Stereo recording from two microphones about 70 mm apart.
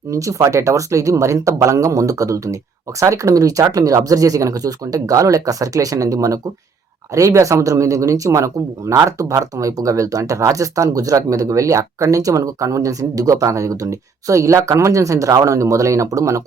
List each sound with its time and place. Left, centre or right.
0.1 s speech: right